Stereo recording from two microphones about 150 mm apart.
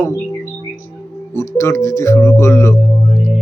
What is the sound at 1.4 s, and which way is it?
Speech, 20° left (ahead or behind).